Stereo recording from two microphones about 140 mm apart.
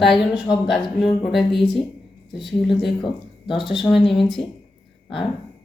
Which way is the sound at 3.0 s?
35° left (ahead or behind).